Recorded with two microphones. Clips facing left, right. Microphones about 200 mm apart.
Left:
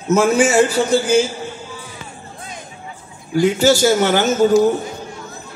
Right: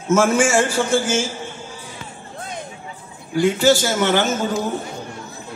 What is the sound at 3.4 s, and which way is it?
A man's voice, 40° left (ahead or behind).